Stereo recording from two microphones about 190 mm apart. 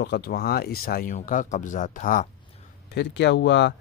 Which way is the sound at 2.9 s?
65° left (ahead or behind).